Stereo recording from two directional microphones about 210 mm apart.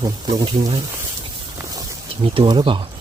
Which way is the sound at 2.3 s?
25° right (ahead or behind).